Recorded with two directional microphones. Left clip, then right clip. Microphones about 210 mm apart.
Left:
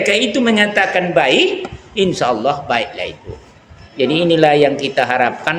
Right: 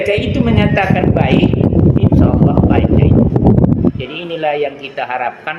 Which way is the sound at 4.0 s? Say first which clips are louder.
Left 8 dB; 50° left (ahead or behind).